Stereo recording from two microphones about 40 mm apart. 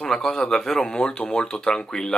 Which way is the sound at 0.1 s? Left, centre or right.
Centre.